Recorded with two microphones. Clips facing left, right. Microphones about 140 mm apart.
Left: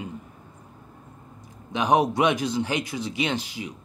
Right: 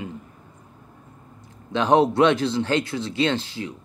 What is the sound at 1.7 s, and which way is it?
Speech, 15° left (ahead or behind).